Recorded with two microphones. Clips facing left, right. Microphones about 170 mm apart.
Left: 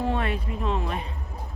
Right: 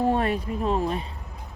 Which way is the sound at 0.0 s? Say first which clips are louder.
Right 4 dB; 40° right (ahead or behind).